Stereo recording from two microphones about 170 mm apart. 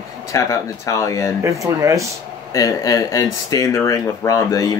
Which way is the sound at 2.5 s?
20° left (ahead or behind).